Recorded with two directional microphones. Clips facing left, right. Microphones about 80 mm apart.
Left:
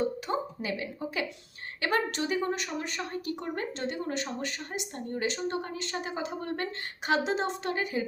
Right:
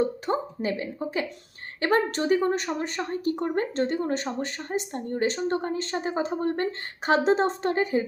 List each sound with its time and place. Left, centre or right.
0.3 s a woman's voice: right